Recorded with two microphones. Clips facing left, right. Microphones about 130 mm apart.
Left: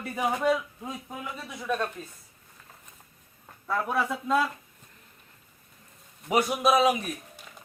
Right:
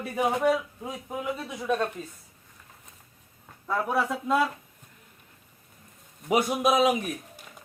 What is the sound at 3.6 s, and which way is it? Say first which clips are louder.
Speech: right 1 dB; 10° right (ahead or behind).